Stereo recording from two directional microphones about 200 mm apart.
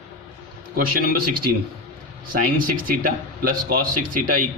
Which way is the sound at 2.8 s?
45° right (ahead or behind).